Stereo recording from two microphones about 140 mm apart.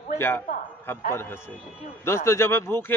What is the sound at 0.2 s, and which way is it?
A man's voice, 15° left (ahead or behind).